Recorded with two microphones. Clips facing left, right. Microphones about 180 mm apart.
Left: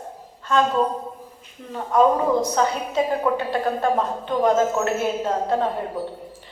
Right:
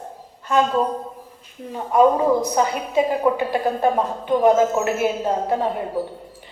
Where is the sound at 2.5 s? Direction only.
10° right (ahead or behind).